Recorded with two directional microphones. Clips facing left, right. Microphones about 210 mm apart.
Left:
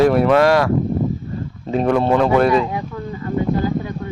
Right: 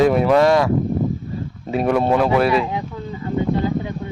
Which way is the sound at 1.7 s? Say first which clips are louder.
Left 1 dB; 10° right (ahead or behind).